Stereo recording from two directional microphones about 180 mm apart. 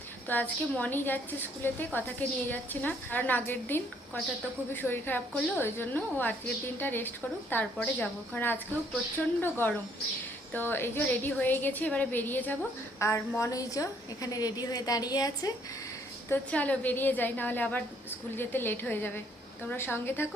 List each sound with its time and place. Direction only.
0.3 s a woman's voice: 10° left (ahead or behind)
16.3 s a woman's voice: 10° left (ahead or behind)